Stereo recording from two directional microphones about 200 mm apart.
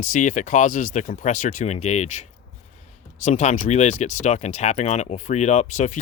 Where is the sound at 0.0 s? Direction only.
40° left (ahead or behind).